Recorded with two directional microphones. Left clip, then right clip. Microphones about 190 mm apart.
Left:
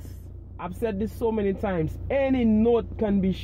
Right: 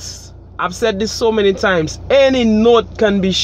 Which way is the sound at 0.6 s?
50° right (ahead or behind).